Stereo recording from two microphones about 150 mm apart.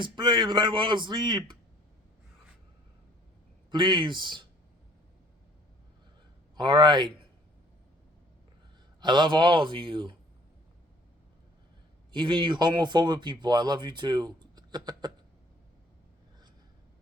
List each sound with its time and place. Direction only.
0.0 s a man's voice: 30° right (ahead or behind)
3.7 s a man's voice: 30° right (ahead or behind)
6.6 s a man's voice: 30° right (ahead or behind)
9.0 s a man's voice: 30° right (ahead or behind)
12.1 s speech: 30° right (ahead or behind)